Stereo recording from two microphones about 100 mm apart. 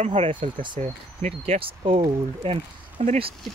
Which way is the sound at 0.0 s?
65° right (ahead or behind).